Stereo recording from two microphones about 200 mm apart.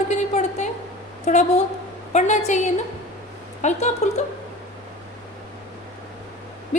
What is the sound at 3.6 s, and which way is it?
Speech, 35° left (ahead or behind).